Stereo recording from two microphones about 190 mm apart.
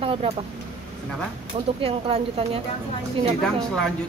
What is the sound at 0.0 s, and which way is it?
Vehicle, 30° right (ahead or behind).